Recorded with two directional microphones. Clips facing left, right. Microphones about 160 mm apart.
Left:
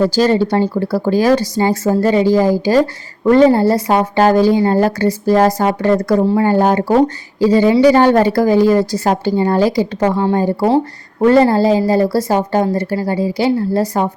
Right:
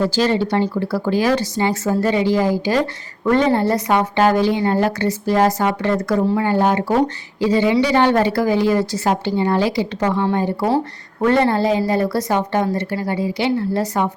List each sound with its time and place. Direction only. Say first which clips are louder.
0.2 s speech: left 3 dB; 40° left (ahead or behind)